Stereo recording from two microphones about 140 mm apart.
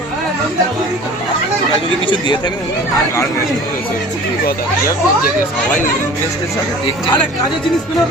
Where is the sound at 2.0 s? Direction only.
35° left (ahead or behind).